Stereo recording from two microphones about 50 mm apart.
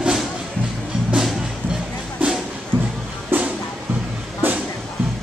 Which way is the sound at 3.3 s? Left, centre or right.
Right.